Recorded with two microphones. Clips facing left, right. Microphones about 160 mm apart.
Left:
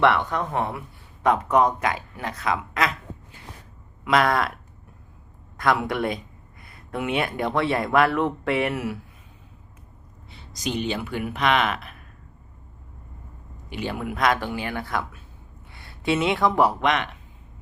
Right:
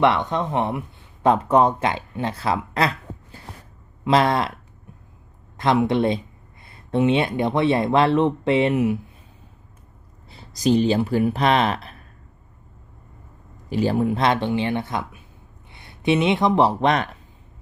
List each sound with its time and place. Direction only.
0.0 s speech: 20° right (ahead or behind)
4.0 s speech: 25° right (ahead or behind)
5.5 s speech: 25° right (ahead or behind)
10.2 s speech: 35° right (ahead or behind)
13.7 s speech: 35° right (ahead or behind)